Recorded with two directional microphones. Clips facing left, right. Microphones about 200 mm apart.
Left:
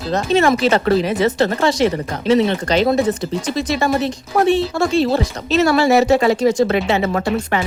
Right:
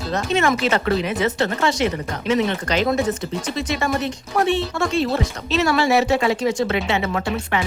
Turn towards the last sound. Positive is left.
turn(degrees=40)  # may be behind; listen again after turning